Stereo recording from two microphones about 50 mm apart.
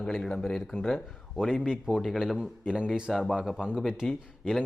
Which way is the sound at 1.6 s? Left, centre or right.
Centre.